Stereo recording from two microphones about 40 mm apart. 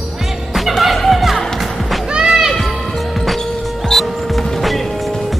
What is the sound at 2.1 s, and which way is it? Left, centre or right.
Music, centre.